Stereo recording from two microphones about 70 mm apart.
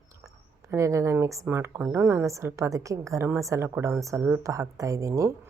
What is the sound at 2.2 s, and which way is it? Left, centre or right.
A woman's voice, right.